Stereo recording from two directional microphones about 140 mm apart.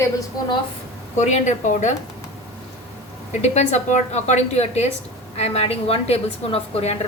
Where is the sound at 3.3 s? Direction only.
55° left (ahead or behind).